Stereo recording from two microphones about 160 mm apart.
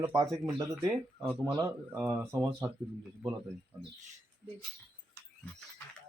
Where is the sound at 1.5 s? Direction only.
15° right (ahead or behind).